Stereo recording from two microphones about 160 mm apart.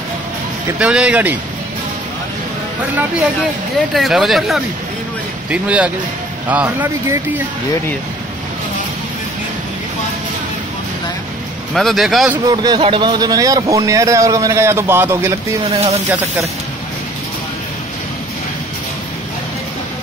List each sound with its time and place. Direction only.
0.7 s speech: 5° right (ahead or behind)
3.9 s speech: centre (ahead or behind)
11.7 s speech: centre (ahead or behind)
12.4 s a man's voice: 25° right (ahead or behind)
15.7 s speech: 40° right (ahead or behind)